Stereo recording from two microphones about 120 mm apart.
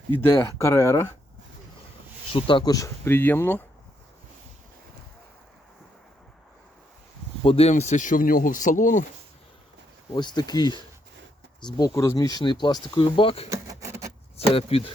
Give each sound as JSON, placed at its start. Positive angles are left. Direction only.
{"t": 0.1, "sound": "speech", "side_deg": 20}
{"t": 2.3, "sound": "speech", "side_deg": 45}
{"t": 2.7, "sound": "speech", "side_deg": 25}
{"t": 7.4, "sound": "speech", "side_deg": 55}
{"t": 10.1, "sound": "speech", "side_deg": 35}
{"t": 13.5, "sound": "a sound", "side_deg": -25}
{"t": 14.3, "sound": "speech", "side_deg": 55}